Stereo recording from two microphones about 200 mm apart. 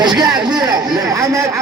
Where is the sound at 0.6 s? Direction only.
20° right (ahead or behind).